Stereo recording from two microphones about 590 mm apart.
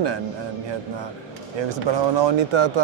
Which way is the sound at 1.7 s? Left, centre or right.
Right.